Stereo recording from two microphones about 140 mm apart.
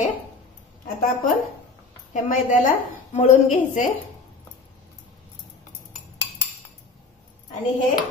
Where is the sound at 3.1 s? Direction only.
60° left (ahead or behind).